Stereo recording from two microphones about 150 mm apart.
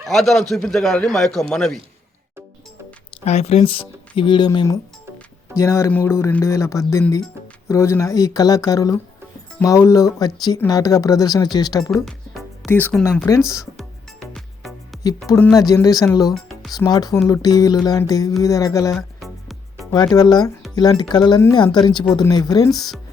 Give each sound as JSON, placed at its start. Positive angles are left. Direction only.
{"t": 0.0, "sound": "speech", "side_deg": 0}
{"t": 3.2, "sound": "speech", "side_deg": 45}
{"t": 12.0, "sound": "music", "side_deg": 0}
{"t": 12.6, "sound": "speech", "side_deg": 15}
{"t": 13.3, "sound": "speech", "side_deg": 25}
{"t": 13.7, "sound": "music", "side_deg": 0}
{"t": 15.3, "sound": "speech", "side_deg": 10}
{"t": 15.5, "sound": "speech", "side_deg": 25}
{"t": 19.2, "sound": "music", "side_deg": 0}
{"t": 19.9, "sound": "speech", "side_deg": 25}